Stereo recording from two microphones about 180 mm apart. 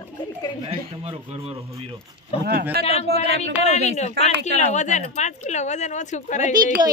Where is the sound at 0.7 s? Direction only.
35° right (ahead or behind).